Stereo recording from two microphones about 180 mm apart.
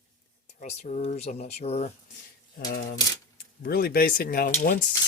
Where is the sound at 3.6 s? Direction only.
60° left (ahead or behind).